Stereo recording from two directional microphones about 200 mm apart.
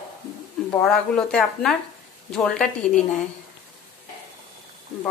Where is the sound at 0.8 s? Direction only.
5° left (ahead or behind).